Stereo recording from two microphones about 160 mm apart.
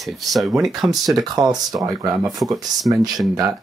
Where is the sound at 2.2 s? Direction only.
Centre (ahead or behind).